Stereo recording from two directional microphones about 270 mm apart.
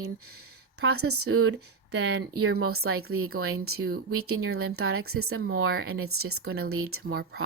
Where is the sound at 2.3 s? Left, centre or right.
Right.